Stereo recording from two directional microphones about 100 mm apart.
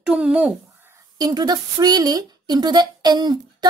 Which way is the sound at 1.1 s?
40° right (ahead or behind).